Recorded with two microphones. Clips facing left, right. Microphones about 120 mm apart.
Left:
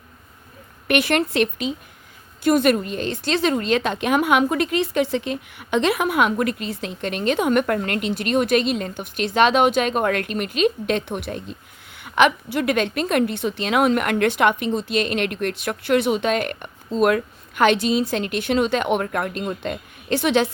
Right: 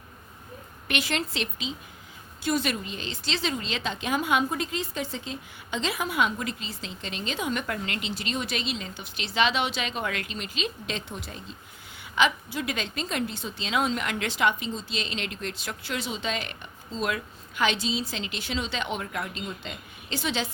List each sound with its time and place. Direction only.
0.9 s a woman's voice: 60° left (ahead or behind)